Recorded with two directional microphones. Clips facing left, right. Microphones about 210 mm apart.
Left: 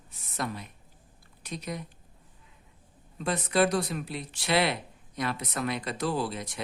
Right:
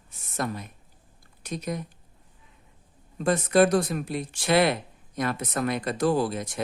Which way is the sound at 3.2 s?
45° right (ahead or behind).